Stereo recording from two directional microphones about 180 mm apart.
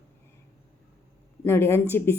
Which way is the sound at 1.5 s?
15° left (ahead or behind).